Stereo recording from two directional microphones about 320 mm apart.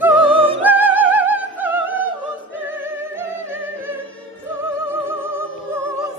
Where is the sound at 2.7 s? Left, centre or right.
Centre.